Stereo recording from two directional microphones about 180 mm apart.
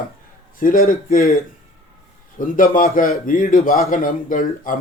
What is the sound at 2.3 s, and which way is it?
Speech, 50° left (ahead or behind).